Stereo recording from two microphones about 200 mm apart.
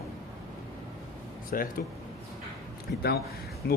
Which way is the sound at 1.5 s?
45° left (ahead or behind).